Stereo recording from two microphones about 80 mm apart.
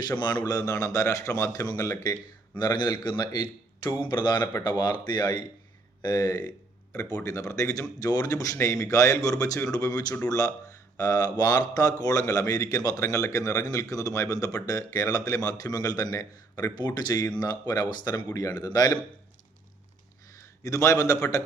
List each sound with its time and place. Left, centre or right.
0.2 s a man's voice: left
2.6 s speech: left
6.9 s a man's voice: left
20.7 s a man's voice: left